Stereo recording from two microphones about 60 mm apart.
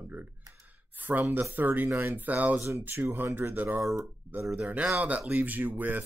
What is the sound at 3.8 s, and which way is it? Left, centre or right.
Speech, right.